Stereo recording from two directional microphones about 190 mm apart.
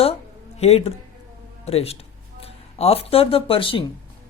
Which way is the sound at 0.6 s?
35° left (ahead or behind).